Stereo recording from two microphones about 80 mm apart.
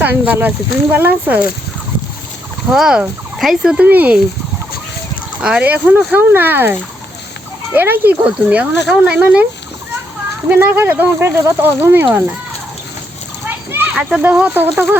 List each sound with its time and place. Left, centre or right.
0.0 s speech: right
2.6 s speech: centre
3.3 s fowl: centre
3.8 s speech: right
5.4 s speech: centre
8.2 s speech: centre
10.5 s speech: right
13.5 s a sound: right
13.9 s speech: centre